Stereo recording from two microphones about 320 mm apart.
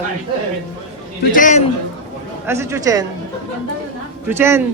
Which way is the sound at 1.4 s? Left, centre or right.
Left.